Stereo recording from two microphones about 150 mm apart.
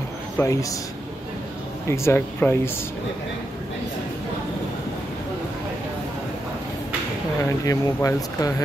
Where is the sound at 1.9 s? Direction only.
15° left (ahead or behind).